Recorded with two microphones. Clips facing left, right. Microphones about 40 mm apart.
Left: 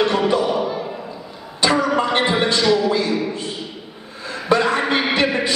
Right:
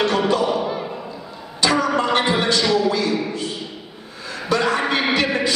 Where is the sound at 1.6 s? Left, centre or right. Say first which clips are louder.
Left 1 dB; left.